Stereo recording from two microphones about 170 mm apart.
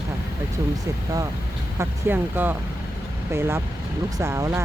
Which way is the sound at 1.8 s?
10° right (ahead or behind).